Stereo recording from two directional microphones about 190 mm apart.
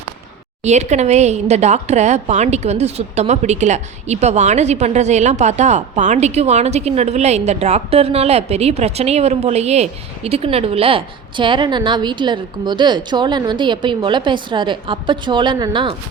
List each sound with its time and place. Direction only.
0.6 s a woman's voice: 35° right (ahead or behind)